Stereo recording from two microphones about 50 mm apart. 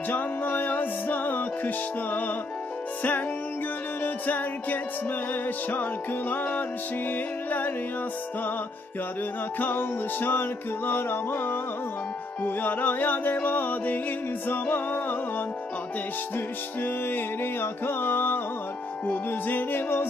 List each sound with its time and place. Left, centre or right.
0.1 s music: left
3.0 s music: left
9.6 s music: left
16.8 s music: left